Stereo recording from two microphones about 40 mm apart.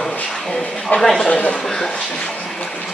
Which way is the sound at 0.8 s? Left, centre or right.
Centre.